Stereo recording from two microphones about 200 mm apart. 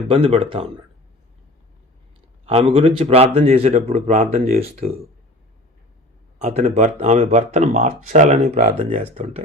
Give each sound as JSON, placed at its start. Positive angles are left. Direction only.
{"t": 0.1, "sound": "speech", "side_deg": -25}
{"t": 2.5, "sound": "speech", "side_deg": -30}
{"t": 6.4, "sound": "speech", "side_deg": -35}